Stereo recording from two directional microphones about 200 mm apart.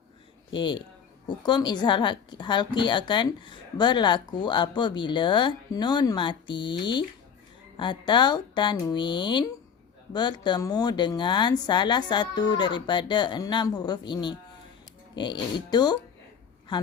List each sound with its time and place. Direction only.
0.5 s a woman's voice: 25° left (ahead or behind)